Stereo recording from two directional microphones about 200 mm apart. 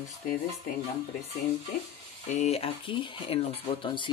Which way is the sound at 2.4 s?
30° left (ahead or behind).